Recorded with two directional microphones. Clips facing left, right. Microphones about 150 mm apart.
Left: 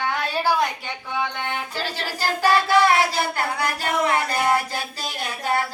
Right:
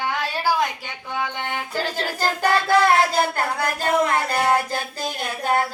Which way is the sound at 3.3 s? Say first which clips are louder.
Right 1 dB; 45° right (ahead or behind).